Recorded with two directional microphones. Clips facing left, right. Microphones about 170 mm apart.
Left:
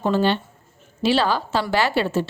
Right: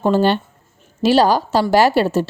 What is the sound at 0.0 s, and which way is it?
A woman's voice, 40° right (ahead or behind).